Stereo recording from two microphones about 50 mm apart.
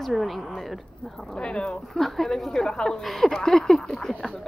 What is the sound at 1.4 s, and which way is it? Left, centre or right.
Speech, centre.